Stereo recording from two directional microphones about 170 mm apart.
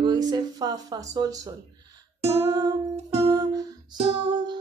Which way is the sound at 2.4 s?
20° right (ahead or behind).